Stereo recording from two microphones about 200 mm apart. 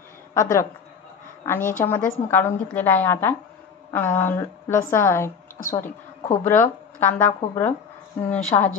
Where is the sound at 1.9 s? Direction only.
10° left (ahead or behind).